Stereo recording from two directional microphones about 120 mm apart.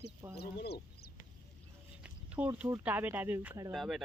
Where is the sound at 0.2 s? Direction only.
25° right (ahead or behind).